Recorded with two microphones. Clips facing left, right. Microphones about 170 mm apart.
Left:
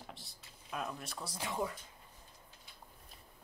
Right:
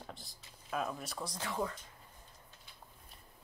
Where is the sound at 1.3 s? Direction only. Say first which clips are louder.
Even; 15° left (ahead or behind).